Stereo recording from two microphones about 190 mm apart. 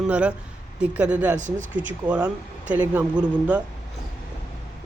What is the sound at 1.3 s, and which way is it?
Speech, 40° right (ahead or behind).